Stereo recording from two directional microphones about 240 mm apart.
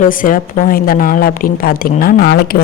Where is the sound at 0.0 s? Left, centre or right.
Left.